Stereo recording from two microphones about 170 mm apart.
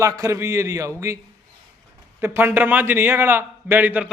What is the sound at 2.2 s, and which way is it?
A man's voice, 10° right (ahead or behind).